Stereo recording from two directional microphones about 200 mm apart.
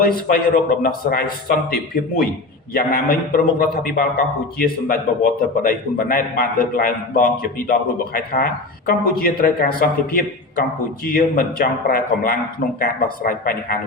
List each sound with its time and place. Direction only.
0.0 s a man's voice: 50° left (ahead or behind)
2.7 s a man's voice: 45° left (ahead or behind)